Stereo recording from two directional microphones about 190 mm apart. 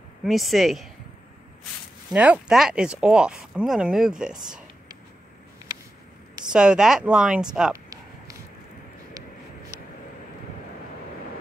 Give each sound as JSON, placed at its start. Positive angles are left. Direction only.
{"t": 0.2, "sound": "speech", "side_deg": 0}
{"t": 2.0, "sound": "speech", "side_deg": -5}
{"t": 6.5, "sound": "speech", "side_deg": -5}
{"t": 7.7, "sound": "a sound", "side_deg": -20}